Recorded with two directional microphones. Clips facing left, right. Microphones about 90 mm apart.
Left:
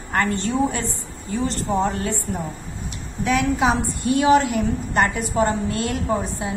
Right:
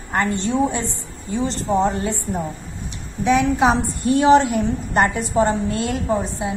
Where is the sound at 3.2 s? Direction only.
25° right (ahead or behind).